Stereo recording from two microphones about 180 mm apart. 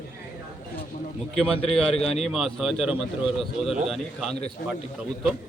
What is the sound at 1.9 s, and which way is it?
Speech, 35° left (ahead or behind).